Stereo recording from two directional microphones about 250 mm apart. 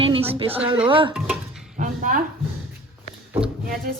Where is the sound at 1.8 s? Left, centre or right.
Right.